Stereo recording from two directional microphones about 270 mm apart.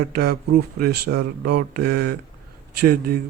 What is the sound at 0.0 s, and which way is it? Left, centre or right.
Speech, right.